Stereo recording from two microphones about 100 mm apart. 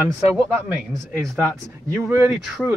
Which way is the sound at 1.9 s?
25° right (ahead or behind).